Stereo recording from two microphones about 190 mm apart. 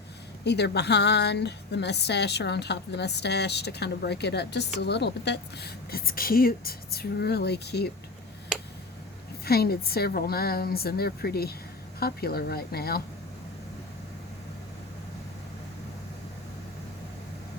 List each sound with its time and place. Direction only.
0.4 s speech: 60° left (ahead or behind)
9.4 s speech: 55° left (ahead or behind)